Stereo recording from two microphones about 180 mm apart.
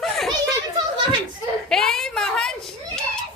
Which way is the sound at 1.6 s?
5° left (ahead or behind).